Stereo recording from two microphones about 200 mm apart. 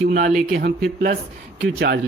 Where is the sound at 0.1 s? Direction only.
40° right (ahead or behind).